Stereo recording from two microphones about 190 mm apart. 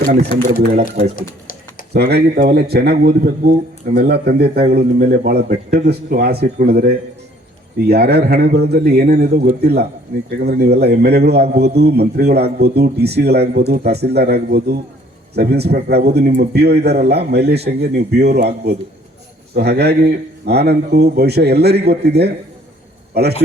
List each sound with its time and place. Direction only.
0.0 s speech: 50° right (ahead or behind)
1.9 s a man's voice: 55° right (ahead or behind)